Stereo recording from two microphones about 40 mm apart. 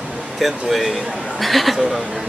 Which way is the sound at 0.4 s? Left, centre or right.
Centre.